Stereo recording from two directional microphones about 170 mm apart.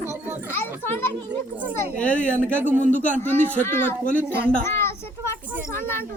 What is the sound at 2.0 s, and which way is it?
A child's voice, 5° left (ahead or behind).